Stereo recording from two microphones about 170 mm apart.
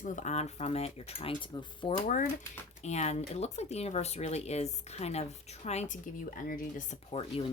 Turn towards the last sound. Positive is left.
turn(degrees=35)  # may be behind; listen again after turning